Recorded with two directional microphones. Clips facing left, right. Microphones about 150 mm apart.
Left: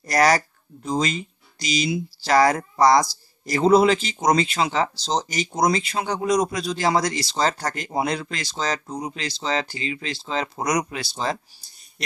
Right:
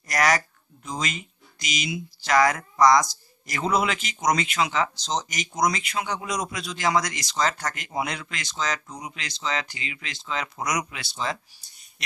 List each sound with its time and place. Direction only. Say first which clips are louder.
0.1 s speech: left 4 dB; 35° left (ahead or behind)